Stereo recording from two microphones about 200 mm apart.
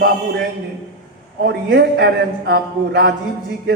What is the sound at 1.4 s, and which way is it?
Speech, 55° right (ahead or behind).